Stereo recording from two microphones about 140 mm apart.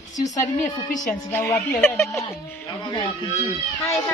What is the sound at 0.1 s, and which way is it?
Speech, 55° left (ahead or behind).